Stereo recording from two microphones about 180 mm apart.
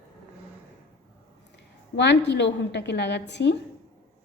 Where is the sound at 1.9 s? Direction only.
75° left (ahead or behind).